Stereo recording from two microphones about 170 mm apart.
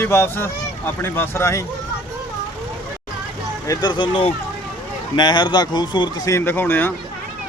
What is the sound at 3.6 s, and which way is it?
Speech, 20° left (ahead or behind).